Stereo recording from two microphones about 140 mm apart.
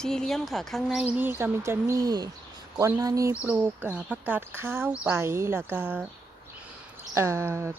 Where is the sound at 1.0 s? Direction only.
10° right (ahead or behind).